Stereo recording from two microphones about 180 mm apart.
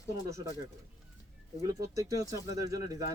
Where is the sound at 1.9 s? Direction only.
20° right (ahead or behind).